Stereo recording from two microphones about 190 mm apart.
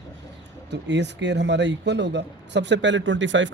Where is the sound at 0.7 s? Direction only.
65° right (ahead or behind).